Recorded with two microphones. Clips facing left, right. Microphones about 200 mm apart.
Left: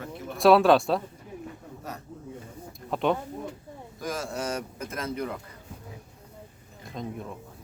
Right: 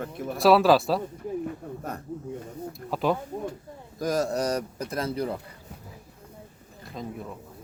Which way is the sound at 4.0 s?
40° right (ahead or behind).